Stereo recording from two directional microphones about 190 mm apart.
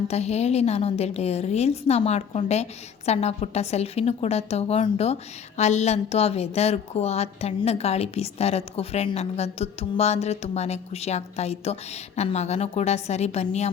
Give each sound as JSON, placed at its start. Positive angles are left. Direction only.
{"t": 0.1, "sound": "a woman's voice", "side_deg": 35}